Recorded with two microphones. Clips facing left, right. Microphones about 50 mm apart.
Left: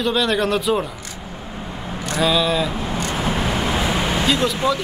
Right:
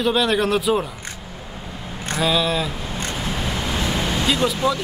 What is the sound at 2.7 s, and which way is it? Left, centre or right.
Vehicle, left.